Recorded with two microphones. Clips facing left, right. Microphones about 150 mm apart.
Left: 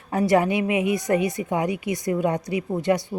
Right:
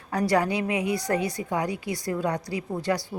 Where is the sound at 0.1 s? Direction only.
25° left (ahead or behind).